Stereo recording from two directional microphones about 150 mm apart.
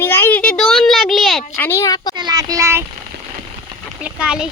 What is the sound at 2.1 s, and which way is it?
Speech, 25° right (ahead or behind).